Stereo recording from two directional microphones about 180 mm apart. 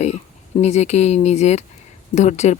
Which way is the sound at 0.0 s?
40° left (ahead or behind).